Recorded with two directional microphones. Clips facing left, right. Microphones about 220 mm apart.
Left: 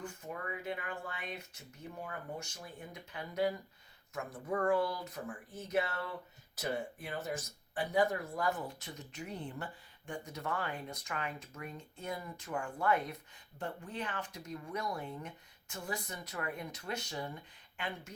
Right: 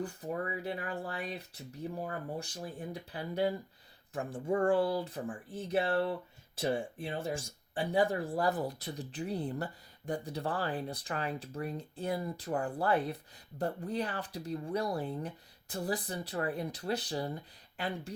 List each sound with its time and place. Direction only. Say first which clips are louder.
0.0 s speech: right 7 dB; 35° right (ahead or behind)